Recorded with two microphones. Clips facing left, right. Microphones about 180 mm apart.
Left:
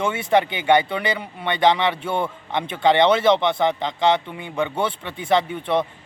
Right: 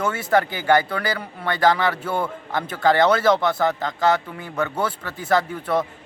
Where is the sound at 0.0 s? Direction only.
25° left (ahead or behind).